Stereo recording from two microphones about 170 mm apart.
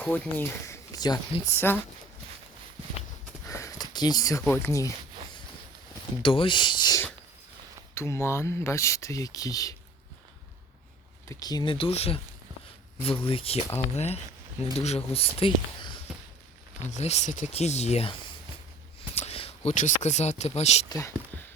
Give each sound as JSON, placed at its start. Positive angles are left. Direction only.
{"t": 0.0, "sound": "speech", "side_deg": 10}
{"t": 3.4, "sound": "a sound", "side_deg": 20}
{"t": 6.2, "sound": "speech", "side_deg": 30}
{"t": 11.3, "sound": "speech", "side_deg": 20}
{"t": 15.4, "sound": "a sound", "side_deg": 30}
{"t": 16.8, "sound": "speech", "side_deg": 40}
{"t": 19.1, "sound": "speech", "side_deg": 35}